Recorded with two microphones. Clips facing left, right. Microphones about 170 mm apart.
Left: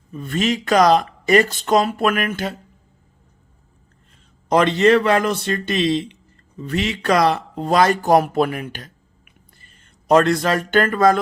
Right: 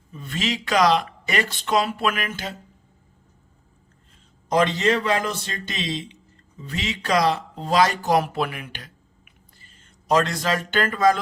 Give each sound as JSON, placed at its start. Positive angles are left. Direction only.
{"t": 0.1, "sound": "speech", "side_deg": 50}
{"t": 4.4, "sound": "speech", "side_deg": 65}
{"t": 9.7, "sound": "speech", "side_deg": 55}